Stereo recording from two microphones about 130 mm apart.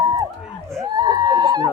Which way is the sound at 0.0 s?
30° right (ahead or behind).